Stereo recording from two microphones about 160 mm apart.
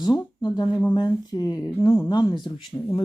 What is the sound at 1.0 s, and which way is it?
Speech, 25° left (ahead or behind).